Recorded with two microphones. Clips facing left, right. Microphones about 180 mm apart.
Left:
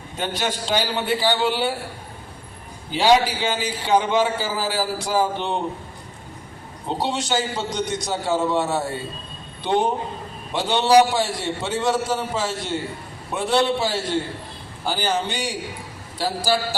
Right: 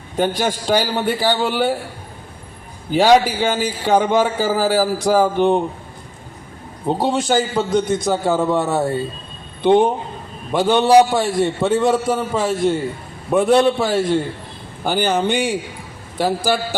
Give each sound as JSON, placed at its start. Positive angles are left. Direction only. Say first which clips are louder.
{"t": 0.2, "sound": "a man's voice", "louder": "right 7 dB", "side_deg": -40}
{"t": 2.9, "sound": "a man's voice", "louder": "right 4 dB", "side_deg": -45}
{"t": 6.8, "sound": "a man's voice", "louder": "right 7 dB", "side_deg": -50}
{"t": 10.5, "sound": "a man's voice", "louder": "right 4 dB", "side_deg": -50}